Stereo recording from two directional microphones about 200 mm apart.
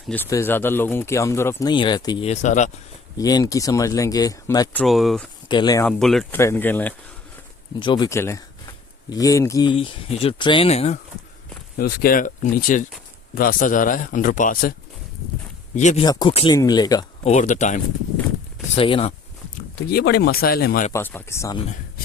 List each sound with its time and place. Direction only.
0.1 s speech: 10° left (ahead or behind); by 2.7 s 35° left (ahead or behind)
3.2 s speech: 20° left (ahead or behind)
4.8 s speech: centre (ahead or behind)
5.5 s speech: 20° left (ahead or behind)
5.8 s speech: centre (ahead or behind)
7.8 s speech: 20° left (ahead or behind)
11.8 s speech: 50° left (ahead or behind)
16.0 s speech: 20° left (ahead or behind)
17.2 s speech: 40° left (ahead or behind)
18.7 s speech: 30° left (ahead or behind)
19.9 s speech: 50° left (ahead or behind)
20.9 s speech: 10° left (ahead or behind)